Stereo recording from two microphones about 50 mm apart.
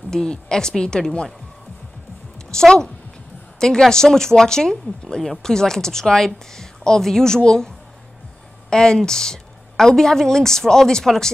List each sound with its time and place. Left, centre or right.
0.1 s a woman's voice: centre
2.5 s a woman's voice: centre